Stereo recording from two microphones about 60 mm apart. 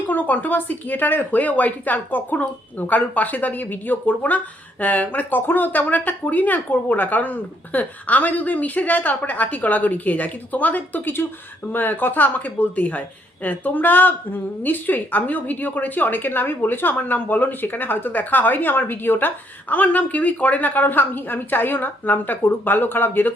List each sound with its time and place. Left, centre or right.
0.1 s a woman's voice: left